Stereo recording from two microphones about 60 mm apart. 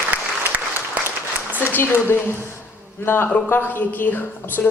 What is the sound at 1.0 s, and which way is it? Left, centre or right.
Applause, right.